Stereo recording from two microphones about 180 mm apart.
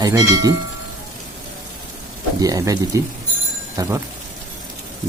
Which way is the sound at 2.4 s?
20° right (ahead or behind).